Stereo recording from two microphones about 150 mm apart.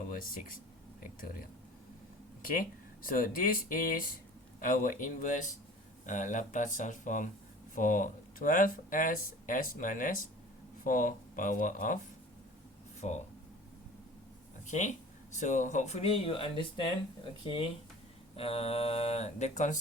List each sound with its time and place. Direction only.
0.1 s speech: 70° left (ahead or behind)
2.4 s speech: 70° left (ahead or behind)
13.0 s speech: 50° left (ahead or behind)
14.7 s speech: 55° left (ahead or behind)